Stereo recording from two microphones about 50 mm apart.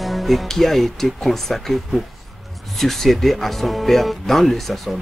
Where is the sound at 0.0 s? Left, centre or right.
Centre.